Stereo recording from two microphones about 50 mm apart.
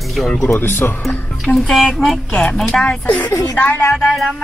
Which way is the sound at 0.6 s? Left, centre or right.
Left.